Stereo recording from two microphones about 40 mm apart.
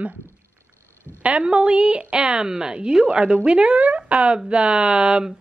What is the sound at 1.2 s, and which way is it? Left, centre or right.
A woman's voice, right.